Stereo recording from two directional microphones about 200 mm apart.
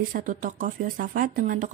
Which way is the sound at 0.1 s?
40° right (ahead or behind).